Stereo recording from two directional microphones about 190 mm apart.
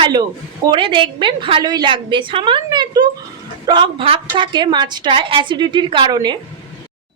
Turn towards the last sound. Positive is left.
turn(degrees=-20)  # may be behind; listen again after turning